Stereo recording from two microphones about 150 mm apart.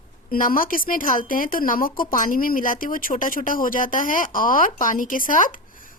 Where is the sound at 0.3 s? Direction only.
65° left (ahead or behind).